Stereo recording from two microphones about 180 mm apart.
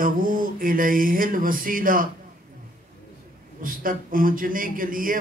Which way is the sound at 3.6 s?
50° right (ahead or behind).